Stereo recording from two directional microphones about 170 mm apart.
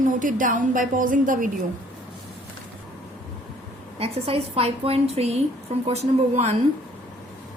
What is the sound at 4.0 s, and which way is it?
A woman's voice, 35° right (ahead or behind).